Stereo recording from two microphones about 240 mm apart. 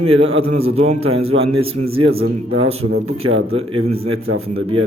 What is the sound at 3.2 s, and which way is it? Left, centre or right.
Speech, right.